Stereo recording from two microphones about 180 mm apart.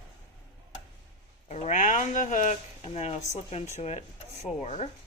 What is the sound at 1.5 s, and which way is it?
Speech, 40° left (ahead or behind).